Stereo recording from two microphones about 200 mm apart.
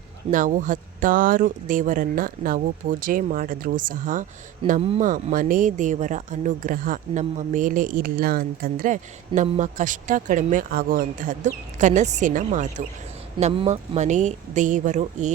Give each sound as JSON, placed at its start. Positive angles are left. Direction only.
{"t": 0.3, "sound": "speech", "side_deg": -40}